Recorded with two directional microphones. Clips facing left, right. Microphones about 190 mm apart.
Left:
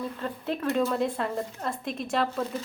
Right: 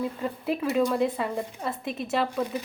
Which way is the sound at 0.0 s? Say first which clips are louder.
Right 3 dB; 10° right (ahead or behind).